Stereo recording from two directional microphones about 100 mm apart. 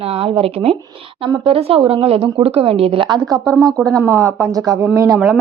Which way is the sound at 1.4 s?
70° right (ahead or behind).